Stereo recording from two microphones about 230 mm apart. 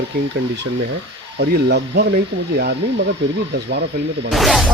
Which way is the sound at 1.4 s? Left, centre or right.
Right.